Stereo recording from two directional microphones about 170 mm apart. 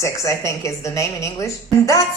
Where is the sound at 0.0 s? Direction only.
15° left (ahead or behind).